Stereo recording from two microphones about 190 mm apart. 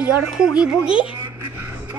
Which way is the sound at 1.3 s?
10° right (ahead or behind).